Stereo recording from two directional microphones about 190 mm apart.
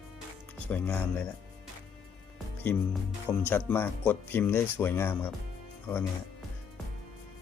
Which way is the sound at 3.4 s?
10° left (ahead or behind).